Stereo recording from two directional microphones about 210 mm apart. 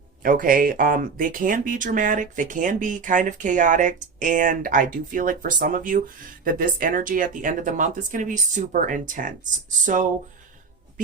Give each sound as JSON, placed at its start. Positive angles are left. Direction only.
{"t": 0.2, "sound": "speech", "side_deg": -40}